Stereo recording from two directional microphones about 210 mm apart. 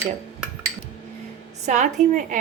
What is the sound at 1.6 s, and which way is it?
Speech, 35° right (ahead or behind).